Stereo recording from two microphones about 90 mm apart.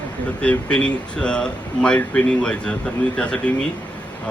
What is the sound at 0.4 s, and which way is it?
Speech, 10° left (ahead or behind).